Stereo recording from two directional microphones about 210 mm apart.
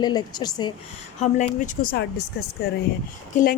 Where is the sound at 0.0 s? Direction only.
20° left (ahead or behind).